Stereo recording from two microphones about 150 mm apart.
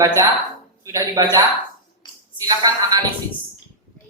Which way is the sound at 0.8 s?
20° right (ahead or behind).